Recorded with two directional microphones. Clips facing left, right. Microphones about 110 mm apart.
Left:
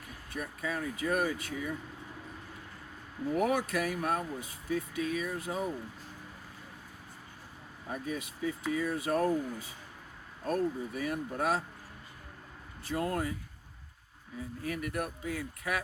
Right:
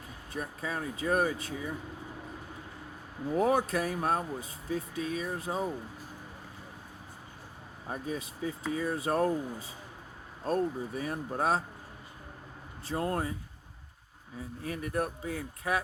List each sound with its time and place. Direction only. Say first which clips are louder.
0.3 s speech: even; 30° right (ahead or behind)
3.4 s speech: right 4 dB; 30° right (ahead or behind)
7.9 s speech: right 1 dB; 30° right (ahead or behind)
12.8 s speech: right 1 dB; 30° right (ahead or behind)
14.6 s speech: right 3 dB; 30° right (ahead or behind)